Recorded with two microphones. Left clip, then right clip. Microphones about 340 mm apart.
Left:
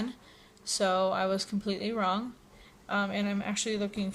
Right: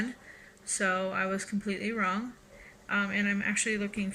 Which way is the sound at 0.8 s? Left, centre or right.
Left.